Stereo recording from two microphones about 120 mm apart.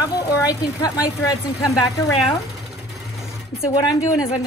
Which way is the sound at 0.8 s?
30° left (ahead or behind).